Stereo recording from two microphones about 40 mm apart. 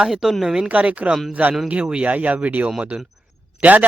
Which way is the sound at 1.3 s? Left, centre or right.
Right.